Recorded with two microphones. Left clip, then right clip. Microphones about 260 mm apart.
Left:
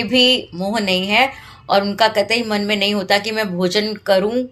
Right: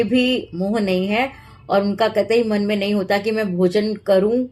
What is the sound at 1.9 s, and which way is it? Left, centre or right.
Speech, left.